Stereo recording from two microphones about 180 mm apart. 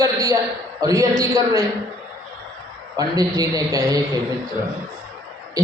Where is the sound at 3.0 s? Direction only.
20° right (ahead or behind).